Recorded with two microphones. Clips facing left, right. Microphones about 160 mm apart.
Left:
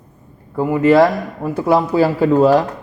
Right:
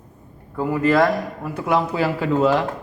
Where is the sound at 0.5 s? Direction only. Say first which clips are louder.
Left 6 dB; 25° left (ahead or behind).